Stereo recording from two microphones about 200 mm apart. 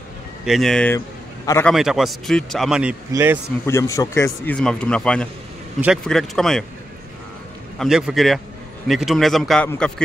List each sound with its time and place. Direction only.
0.5 s a man's voice: centre (ahead or behind)
0.9 s a sound: 15° left (ahead or behind)
1.7 s a man's voice: centre (ahead or behind)
3.6 s a man's voice: 15° left (ahead or behind)
7.8 s a man's voice: centre (ahead or behind)